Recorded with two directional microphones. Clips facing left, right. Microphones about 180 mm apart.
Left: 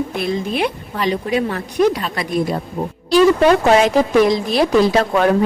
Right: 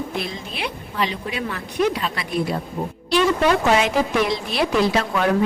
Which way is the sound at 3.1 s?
40° left (ahead or behind).